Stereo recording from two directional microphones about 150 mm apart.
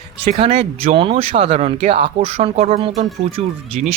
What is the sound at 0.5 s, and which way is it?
Speech, 50° right (ahead or behind).